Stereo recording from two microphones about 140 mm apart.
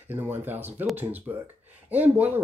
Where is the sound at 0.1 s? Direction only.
15° right (ahead or behind).